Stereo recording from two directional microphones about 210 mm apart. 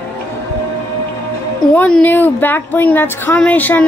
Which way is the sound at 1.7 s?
5° left (ahead or behind).